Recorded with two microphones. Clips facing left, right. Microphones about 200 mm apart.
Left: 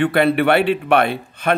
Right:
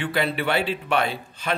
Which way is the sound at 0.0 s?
60° left (ahead or behind).